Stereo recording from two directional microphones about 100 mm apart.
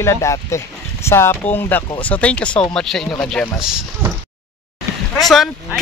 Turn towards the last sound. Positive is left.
turn(degrees=0)  # may be behind; listen again after turning